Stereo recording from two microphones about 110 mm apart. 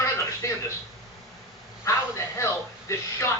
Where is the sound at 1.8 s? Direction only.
25° left (ahead or behind).